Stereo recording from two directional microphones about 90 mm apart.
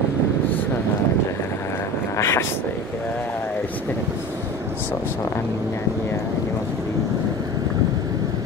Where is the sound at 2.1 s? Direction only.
30° left (ahead or behind).